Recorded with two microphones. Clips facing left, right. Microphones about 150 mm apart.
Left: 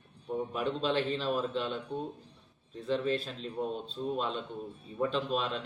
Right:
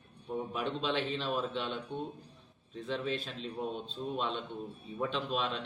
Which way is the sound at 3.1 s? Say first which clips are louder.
Left 4 dB; 40° left (ahead or behind).